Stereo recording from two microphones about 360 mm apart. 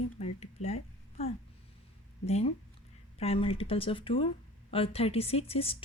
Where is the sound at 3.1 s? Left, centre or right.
Centre.